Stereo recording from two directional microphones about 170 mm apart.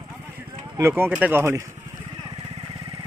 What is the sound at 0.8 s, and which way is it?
Speech, 10° right (ahead or behind).